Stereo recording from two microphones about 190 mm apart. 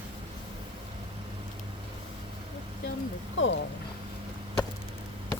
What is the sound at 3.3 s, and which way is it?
Speech, 80° left.